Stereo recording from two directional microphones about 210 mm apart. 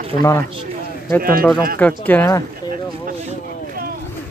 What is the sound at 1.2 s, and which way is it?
Speech, 45° right (ahead or behind).